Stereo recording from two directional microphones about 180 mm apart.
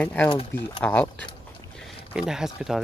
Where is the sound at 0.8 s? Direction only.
10° left (ahead or behind).